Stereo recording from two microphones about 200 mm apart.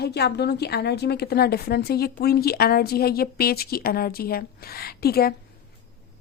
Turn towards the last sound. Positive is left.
turn(degrees=50)  # may be behind; listen again after turning